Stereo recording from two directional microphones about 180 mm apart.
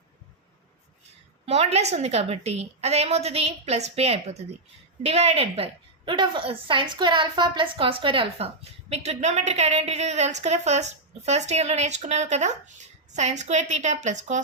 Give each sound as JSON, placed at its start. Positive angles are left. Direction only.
{"t": 1.5, "sound": "a woman's voice", "side_deg": -35}